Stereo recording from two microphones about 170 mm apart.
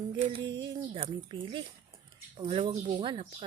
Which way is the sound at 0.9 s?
30° right (ahead or behind).